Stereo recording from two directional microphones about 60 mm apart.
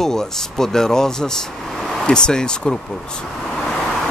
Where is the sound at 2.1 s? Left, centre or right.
Centre.